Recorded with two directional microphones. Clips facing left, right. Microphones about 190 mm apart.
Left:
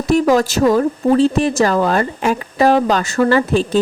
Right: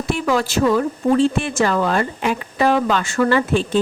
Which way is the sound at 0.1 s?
40° left (ahead or behind).